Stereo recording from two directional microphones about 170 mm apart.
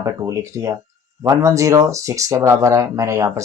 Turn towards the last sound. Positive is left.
turn(degrees=-20)  # may be behind; listen again after turning